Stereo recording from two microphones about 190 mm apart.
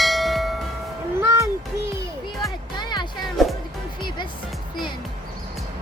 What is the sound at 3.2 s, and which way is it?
Music, centre (ahead or behind).